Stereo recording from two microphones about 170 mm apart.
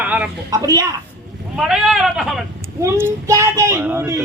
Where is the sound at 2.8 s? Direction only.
15° right (ahead or behind).